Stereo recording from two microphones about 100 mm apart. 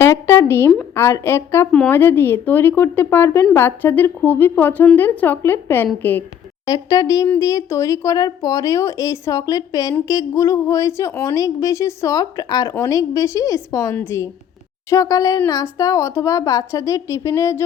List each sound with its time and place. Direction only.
0.0 s speech: 25° left (ahead or behind)
6.7 s a woman's voice: 40° left (ahead or behind)